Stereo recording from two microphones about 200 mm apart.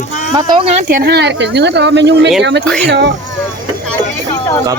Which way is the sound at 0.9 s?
50° right (ahead or behind).